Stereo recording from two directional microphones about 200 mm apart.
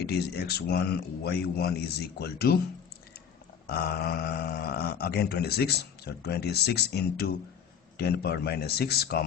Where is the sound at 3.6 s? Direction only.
50° left (ahead or behind).